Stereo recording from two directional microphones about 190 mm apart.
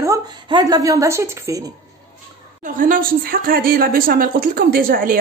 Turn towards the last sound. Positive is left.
turn(degrees=-50)  # may be behind; listen again after turning